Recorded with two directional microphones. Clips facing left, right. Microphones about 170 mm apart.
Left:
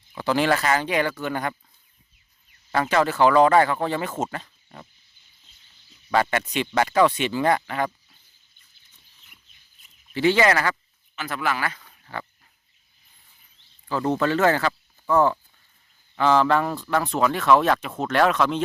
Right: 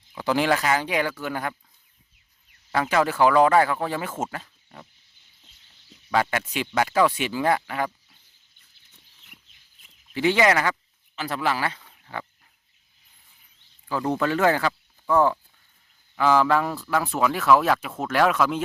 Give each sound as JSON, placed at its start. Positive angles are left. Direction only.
{"t": 0.1, "sound": "speech", "side_deg": -10}
{"t": 2.7, "sound": "speech", "side_deg": -10}
{"t": 6.3, "sound": "speech", "side_deg": -5}
{"t": 8.9, "sound": "goat", "side_deg": -75}
{"t": 10.2, "sound": "speech", "side_deg": -15}
{"t": 11.1, "sound": "speech", "side_deg": -30}
{"t": 11.8, "sound": "pig", "side_deg": -15}
{"t": 13.8, "sound": "speech", "side_deg": -10}